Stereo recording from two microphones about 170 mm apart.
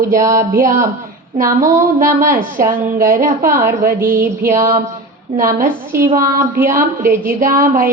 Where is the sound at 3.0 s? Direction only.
55° right (ahead or behind).